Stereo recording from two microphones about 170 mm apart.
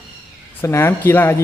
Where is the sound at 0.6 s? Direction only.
15° left (ahead or behind).